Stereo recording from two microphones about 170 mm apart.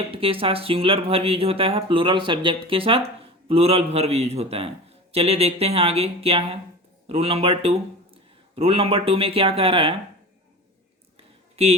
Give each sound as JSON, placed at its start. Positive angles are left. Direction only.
{"t": 0.1, "sound": "a man's voice", "side_deg": -35}
{"t": 11.5, "sound": "speech", "side_deg": -35}